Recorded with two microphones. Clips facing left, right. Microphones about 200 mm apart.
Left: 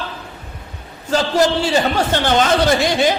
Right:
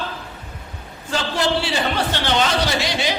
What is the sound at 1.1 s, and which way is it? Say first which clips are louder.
A man's voice: left 6 dB; 45° left (ahead or behind).